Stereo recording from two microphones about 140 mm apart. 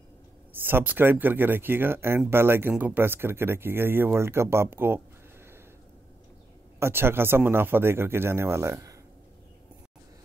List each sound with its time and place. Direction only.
0.5 s speech: 15° right (ahead or behind)
6.8 s speech: 15° right (ahead or behind)